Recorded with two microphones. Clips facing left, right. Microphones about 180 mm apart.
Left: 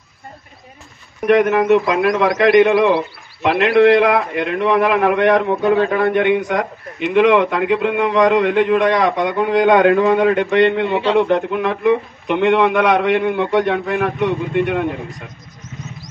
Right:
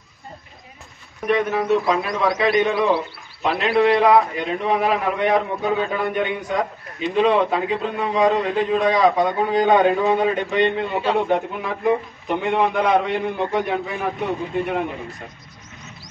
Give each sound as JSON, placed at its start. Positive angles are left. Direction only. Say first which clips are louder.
{"t": 1.2, "sound": "a man's voice", "louder": "left 7 dB", "side_deg": 85}